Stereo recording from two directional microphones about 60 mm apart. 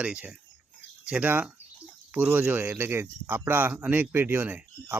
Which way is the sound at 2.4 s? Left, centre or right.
Right.